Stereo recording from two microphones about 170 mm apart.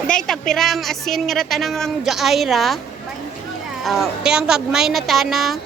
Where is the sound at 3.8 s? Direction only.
Centre (ahead or behind).